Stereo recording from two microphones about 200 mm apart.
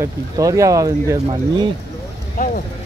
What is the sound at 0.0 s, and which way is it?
Speech, 15° right (ahead or behind).